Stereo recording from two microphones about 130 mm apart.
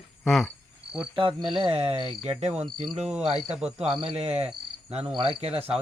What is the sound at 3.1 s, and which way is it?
Speech, 5° right (ahead or behind).